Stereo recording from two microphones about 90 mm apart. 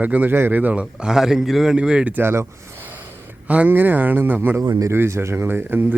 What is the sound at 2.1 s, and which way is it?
Speech, 30° right (ahead or behind).